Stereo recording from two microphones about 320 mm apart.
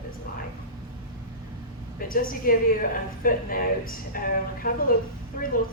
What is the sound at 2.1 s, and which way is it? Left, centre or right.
A woman's voice, left.